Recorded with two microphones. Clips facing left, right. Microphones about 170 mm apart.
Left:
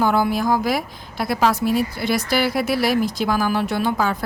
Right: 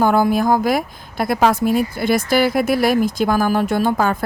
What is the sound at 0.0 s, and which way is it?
Speech, 50° right (ahead or behind).